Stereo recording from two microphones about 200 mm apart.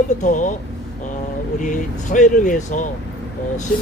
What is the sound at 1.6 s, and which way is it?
Speech, 40° left (ahead or behind).